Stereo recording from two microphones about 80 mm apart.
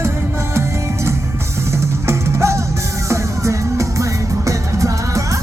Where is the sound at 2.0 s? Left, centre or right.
Right.